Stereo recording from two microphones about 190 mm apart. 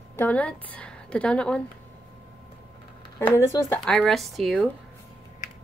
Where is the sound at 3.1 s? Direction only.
15° left (ahead or behind).